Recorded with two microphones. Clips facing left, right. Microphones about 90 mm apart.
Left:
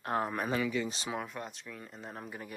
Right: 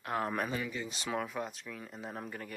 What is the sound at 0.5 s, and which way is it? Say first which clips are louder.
Speech: left 5 dB; 85° left.